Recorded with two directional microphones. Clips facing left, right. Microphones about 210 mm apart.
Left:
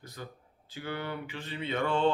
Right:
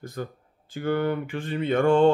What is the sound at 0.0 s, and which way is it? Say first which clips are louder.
Speech: right 10 dB; 50° right (ahead or behind).